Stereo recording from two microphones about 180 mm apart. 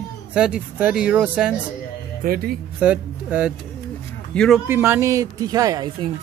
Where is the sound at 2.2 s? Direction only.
55° right (ahead or behind).